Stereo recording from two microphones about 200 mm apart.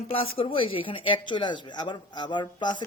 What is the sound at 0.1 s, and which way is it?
Speech, 25° left (ahead or behind).